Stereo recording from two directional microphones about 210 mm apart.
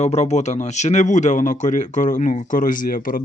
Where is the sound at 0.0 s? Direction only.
30° left (ahead or behind).